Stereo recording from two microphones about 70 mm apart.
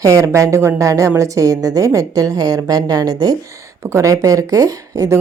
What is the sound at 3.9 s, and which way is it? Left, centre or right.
Speech, right.